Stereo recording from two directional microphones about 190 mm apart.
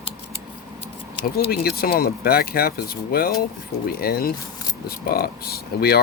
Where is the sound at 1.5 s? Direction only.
55° left (ahead or behind).